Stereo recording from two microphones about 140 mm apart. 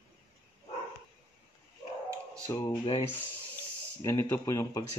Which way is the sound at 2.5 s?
25° left (ahead or behind).